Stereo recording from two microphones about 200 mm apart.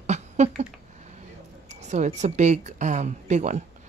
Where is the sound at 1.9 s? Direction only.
35° right (ahead or behind).